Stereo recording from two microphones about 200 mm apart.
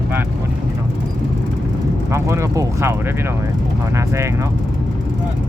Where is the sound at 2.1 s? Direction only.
15° right (ahead or behind).